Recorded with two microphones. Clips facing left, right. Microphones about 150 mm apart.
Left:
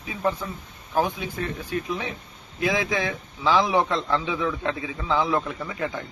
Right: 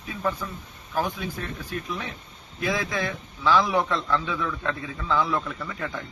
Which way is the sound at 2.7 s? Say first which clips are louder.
Left 1 dB; 15° left (ahead or behind).